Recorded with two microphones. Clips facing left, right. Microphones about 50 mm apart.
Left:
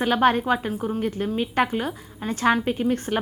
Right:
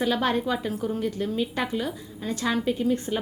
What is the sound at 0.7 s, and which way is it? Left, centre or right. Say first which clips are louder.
Speech: left 1 dB; left.